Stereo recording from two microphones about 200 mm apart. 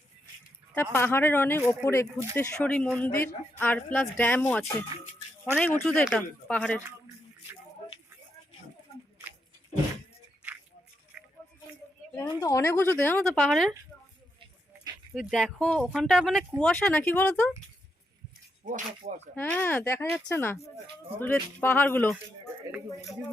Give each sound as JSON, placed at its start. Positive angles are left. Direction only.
{"t": 0.7, "sound": "speech", "side_deg": 10}
{"t": 11.1, "sound": "a sound", "side_deg": -5}
{"t": 12.1, "sound": "speech", "side_deg": 15}
{"t": 15.1, "sound": "speech", "side_deg": 0}
{"t": 18.6, "sound": "speech", "side_deg": -35}
{"t": 19.4, "sound": "speech", "side_deg": 10}